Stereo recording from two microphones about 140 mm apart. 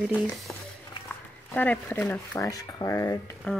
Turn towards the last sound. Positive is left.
turn(degrees=10)  # may be behind; listen again after turning